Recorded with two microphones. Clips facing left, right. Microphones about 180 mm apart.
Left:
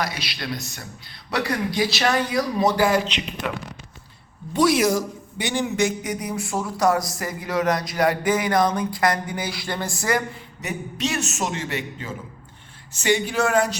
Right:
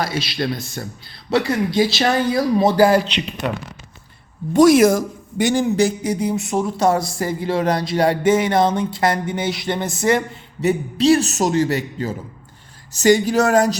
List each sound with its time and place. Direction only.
0.0 s speech: 25° right (ahead or behind)
4.5 s speech: 50° right (ahead or behind)